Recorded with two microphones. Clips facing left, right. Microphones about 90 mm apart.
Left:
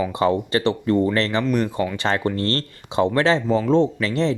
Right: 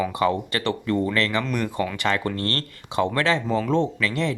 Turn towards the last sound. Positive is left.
turn(degrees=30)  # may be behind; listen again after turning